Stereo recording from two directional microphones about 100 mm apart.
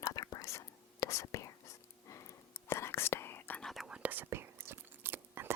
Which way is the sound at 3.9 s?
15° right (ahead or behind).